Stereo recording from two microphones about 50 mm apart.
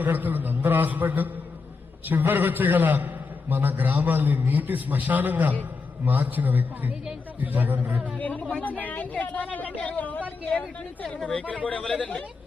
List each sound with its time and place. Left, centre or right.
0.0 s a man's voice: right
8.2 s speech: left
11.2 s speech: centre
11.6 s a man's voice: left